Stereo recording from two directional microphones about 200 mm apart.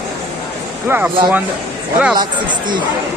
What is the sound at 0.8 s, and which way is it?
Speech, 10° right (ahead or behind).